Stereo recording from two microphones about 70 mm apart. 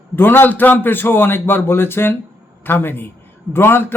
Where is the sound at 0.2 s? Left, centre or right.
Left.